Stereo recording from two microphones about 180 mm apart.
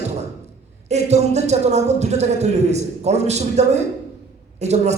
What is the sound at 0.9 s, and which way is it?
A man's voice, 40° right (ahead or behind).